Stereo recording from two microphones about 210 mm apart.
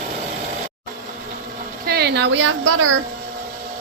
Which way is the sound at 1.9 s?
50° right (ahead or behind).